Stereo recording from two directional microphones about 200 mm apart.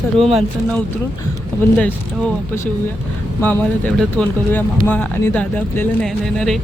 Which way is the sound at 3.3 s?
10° left (ahead or behind).